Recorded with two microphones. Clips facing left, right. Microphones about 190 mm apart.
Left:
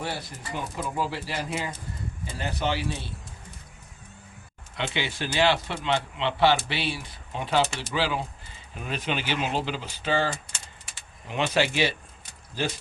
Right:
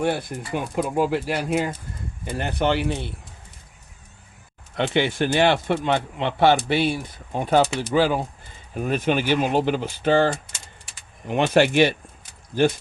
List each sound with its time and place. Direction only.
0.0 s speech: 55° right (ahead or behind)
4.7 s speech: 55° right (ahead or behind)
11.3 s speech: 55° right (ahead or behind)